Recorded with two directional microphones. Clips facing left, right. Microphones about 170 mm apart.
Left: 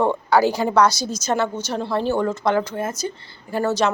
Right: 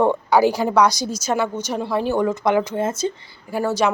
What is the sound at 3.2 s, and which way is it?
Speech, 10° right (ahead or behind).